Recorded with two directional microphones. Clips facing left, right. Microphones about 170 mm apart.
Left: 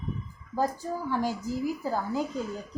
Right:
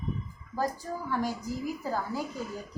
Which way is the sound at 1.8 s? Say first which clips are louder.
Left 3 dB; 15° left (ahead or behind).